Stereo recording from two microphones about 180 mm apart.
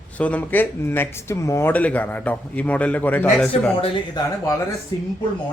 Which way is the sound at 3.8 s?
25° left (ahead or behind).